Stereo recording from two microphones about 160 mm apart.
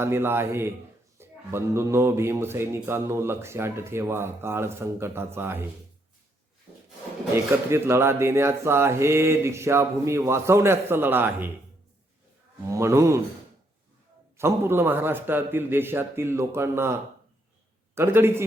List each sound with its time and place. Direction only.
0.0 s speech: 15° right (ahead or behind)
7.3 s speech: 15° right (ahead or behind)
12.6 s speech: 20° right (ahead or behind)
14.3 s speech: 15° right (ahead or behind)
17.9 s speech: 15° right (ahead or behind)